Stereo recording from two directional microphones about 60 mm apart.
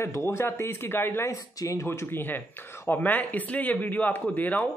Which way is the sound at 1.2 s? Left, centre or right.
Left.